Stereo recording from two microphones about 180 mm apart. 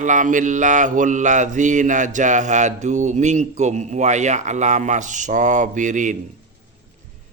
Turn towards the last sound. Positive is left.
turn(degrees=-45)  # may be behind; listen again after turning